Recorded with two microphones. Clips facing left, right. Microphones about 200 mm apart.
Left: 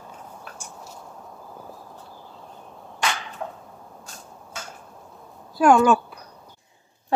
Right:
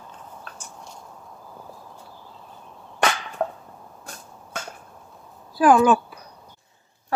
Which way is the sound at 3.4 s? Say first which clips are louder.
Right 9 dB; 60° right (ahead or behind).